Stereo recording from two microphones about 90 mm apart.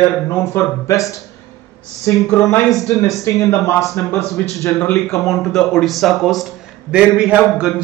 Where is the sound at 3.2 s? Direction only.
35° left (ahead or behind).